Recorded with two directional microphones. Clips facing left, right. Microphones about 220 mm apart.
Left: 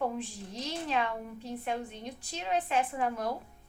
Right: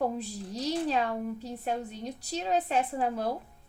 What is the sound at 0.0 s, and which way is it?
A woman's voice, 40° right (ahead or behind).